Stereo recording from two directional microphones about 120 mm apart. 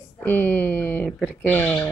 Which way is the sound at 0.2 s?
15° left (ahead or behind).